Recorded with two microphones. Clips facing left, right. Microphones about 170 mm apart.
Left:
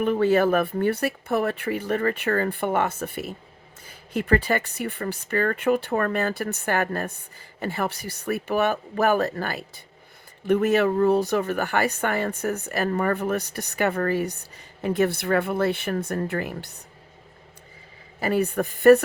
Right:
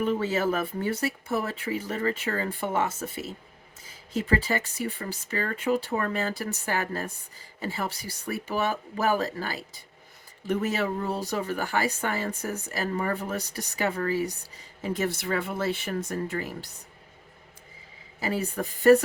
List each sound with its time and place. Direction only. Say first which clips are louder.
0.0 s speech: left 6 dB; 60° left (ahead or behind)
18.2 s speech: left 6 dB; 60° left (ahead or behind)